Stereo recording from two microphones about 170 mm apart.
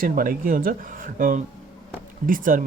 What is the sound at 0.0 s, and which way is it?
Speech, 55° right (ahead or behind).